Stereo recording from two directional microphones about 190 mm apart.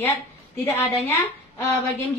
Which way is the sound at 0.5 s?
10° left (ahead or behind).